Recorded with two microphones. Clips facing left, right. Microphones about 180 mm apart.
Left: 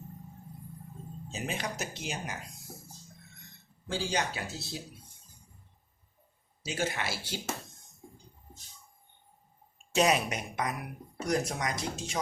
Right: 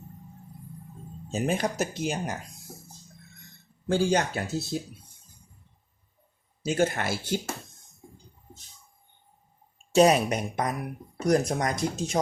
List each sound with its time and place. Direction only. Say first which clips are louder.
1.3 s speech: right 9 dB; 50° right (ahead or behind)
3.8 s speech: right 8 dB; 50° right (ahead or behind)
6.7 s speech: right 8 dB; 50° right (ahead or behind)
9.9 s speech: right 7 dB; 35° right (ahead or behind)